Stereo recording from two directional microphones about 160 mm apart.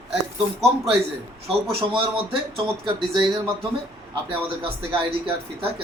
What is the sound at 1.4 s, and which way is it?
Speech, 35° right (ahead or behind).